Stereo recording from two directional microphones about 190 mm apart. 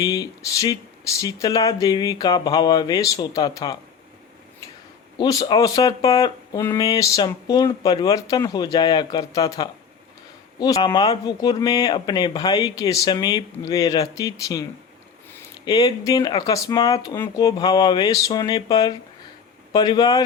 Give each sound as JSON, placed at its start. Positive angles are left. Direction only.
{"t": 0.0, "sound": "speech", "side_deg": 20}
{"t": 5.1, "sound": "speech", "side_deg": 20}
{"t": 15.6, "sound": "speech", "side_deg": 20}